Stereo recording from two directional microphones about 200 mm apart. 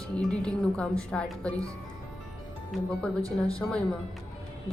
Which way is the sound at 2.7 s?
5° left (ahead or behind).